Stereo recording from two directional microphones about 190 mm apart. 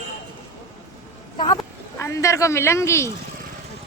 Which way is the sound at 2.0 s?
15° left (ahead or behind).